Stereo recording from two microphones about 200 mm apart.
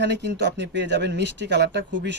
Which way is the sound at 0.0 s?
60° right (ahead or behind).